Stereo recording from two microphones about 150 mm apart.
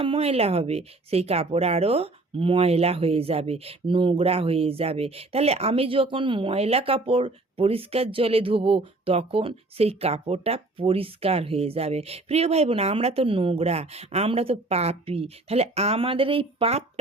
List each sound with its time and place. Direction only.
0.0 s speech: 40° right (ahead or behind)